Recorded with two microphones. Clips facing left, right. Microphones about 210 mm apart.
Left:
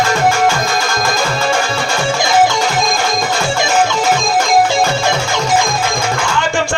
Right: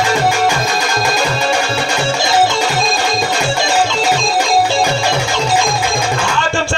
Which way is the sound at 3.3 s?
15° right (ahead or behind).